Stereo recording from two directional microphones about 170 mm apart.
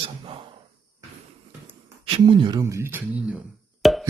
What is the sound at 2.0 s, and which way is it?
Speech, 30° right (ahead or behind).